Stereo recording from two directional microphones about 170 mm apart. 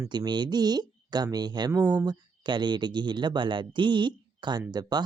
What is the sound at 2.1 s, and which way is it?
Speech, 25° right (ahead or behind).